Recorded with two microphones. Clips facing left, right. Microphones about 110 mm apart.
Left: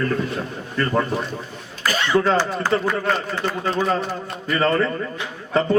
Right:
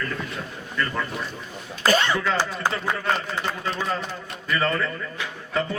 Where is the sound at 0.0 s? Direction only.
40° left (ahead or behind).